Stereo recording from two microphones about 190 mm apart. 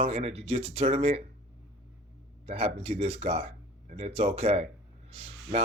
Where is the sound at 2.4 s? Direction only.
30° right (ahead or behind).